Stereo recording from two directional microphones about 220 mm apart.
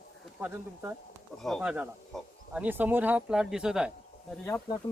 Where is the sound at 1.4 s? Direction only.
Centre (ahead or behind).